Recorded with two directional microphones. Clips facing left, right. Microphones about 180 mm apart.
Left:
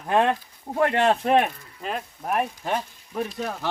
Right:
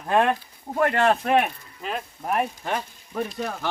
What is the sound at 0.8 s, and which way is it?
Speech, 20° left (ahead or behind).